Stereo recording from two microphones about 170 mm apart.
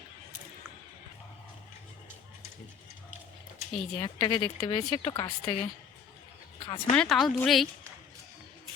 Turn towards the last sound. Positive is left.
turn(degrees=0)  # may be behind; listen again after turning